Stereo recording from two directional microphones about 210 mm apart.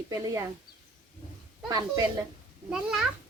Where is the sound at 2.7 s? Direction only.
Centre (ahead or behind).